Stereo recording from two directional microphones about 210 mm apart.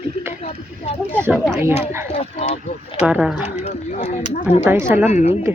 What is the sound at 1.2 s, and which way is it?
Speech, 5° right (ahead or behind).